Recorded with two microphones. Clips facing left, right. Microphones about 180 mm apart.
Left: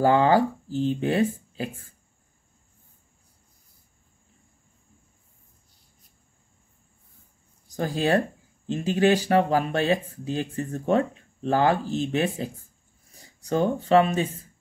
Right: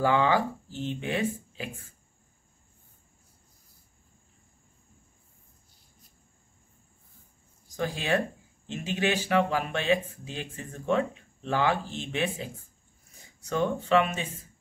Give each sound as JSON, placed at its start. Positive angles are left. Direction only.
{"t": 0.0, "sound": "speech", "side_deg": 40}
{"t": 7.7, "sound": "speech", "side_deg": 40}